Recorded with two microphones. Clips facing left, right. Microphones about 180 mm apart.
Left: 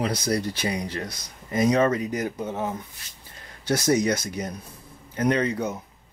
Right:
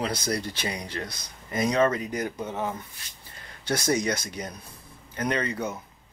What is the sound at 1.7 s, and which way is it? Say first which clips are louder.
Speech: left 1 dB; 30° left (ahead or behind).